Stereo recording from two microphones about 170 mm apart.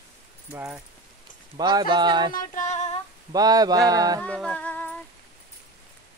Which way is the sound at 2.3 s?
45° left (ahead or behind).